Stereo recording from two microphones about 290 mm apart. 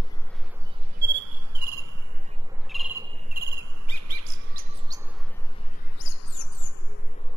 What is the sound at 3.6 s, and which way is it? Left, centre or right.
Cricket, right.